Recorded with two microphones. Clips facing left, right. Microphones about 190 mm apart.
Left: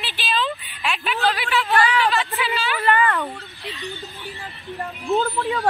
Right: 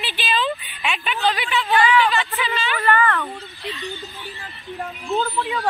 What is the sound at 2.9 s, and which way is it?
Speech, 15° left (ahead or behind).